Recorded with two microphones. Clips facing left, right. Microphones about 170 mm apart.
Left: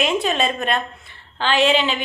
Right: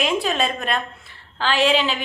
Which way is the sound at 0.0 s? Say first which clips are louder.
Left 1 dB; centre (ahead or behind).